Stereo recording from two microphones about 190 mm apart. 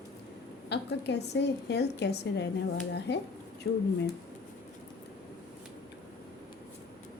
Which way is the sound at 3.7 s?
75° left (ahead or behind).